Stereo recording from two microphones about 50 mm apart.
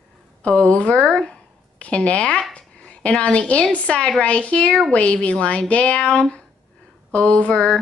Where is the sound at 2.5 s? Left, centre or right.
Left.